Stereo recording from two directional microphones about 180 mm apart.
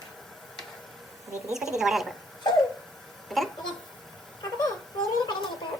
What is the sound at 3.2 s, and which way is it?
Speech, centre (ahead or behind).